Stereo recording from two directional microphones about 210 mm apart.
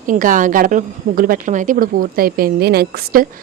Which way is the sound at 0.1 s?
40° right (ahead or behind).